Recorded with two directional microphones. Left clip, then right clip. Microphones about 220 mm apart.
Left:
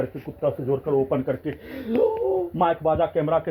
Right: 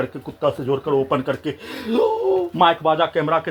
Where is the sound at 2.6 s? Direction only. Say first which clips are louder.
Right 5 dB; 15° right (ahead or behind).